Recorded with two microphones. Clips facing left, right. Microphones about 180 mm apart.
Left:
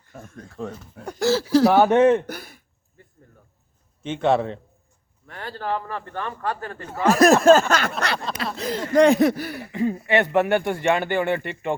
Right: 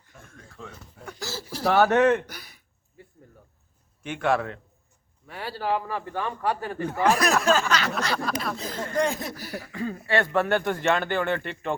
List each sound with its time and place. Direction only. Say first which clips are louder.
0.1 s speech: left 9 dB; 40° left (ahead or behind)
1.2 s speech: left 18 dB; 80° left
1.6 s speech: left 2 dB; 15° left (ahead or behind)
2.2 s a sound: left 10 dB; 50° left (ahead or behind)
4.0 s a man's voice: left 4 dB; 25° left (ahead or behind)
5.3 s a man's voice: even; 10° right (ahead or behind)
7.1 s a sound: left 9 dB; 45° left (ahead or behind)
8.5 s speech: left 14 dB; 75° left (ahead or behind)
9.4 s a sound: left 5 dB; 60° left (ahead or behind)
9.7 s speech: left 5 dB; 20° left (ahead or behind)